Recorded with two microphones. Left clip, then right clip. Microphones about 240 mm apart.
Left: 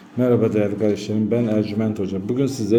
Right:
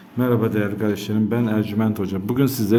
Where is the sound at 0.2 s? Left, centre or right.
Centre.